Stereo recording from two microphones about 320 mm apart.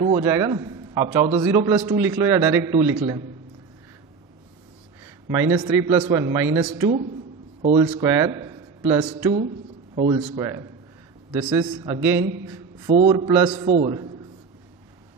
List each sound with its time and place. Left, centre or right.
0.0 s a man's voice: centre
5.0 s a man's voice: centre
6.7 s a man's voice: centre